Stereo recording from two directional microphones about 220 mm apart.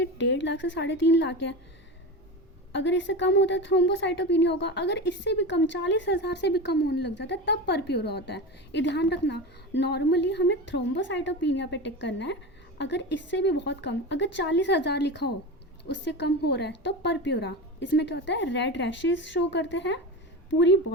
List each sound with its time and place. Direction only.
0.0 s a woman's voice: 55° left (ahead or behind)
2.7 s a woman's voice: 55° left (ahead or behind)